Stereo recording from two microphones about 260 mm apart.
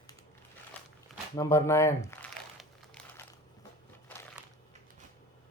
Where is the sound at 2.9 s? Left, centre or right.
Centre.